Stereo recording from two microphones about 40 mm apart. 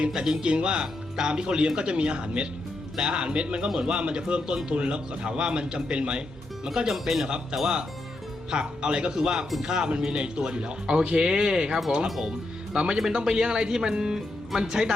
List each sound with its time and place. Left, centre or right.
0.1 s speech: centre
3.7 s speech: centre
3.9 s speech: right
6.7 s speech: centre
8.4 s speech: right
12.0 s speech: centre
12.7 s speech: right